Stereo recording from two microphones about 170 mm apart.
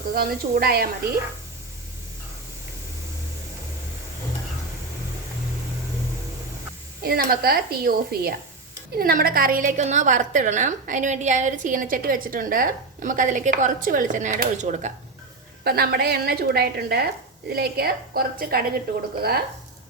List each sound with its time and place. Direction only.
0.1 s a woman's voice: 60° right (ahead or behind)
7.0 s a woman's voice: 60° right (ahead or behind); by 14.9 s 45° right (ahead or behind)
15.6 s a woman's voice: 65° right (ahead or behind)